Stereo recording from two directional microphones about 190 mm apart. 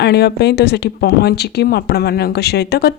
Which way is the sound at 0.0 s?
55° left (ahead or behind).